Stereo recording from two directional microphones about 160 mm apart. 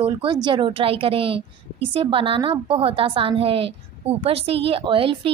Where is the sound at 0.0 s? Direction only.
30° right (ahead or behind).